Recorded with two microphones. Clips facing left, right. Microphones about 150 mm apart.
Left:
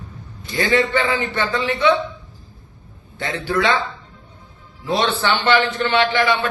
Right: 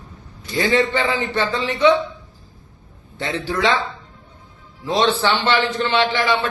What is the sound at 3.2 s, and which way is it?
Speech, 20° right (ahead or behind).